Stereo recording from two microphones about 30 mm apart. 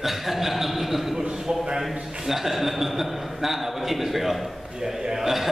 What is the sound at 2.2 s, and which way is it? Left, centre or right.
A man's voice, centre.